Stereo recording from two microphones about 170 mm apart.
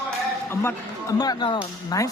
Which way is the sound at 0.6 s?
20° left (ahead or behind).